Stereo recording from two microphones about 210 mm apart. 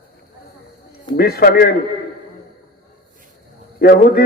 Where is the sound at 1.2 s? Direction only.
45° left (ahead or behind).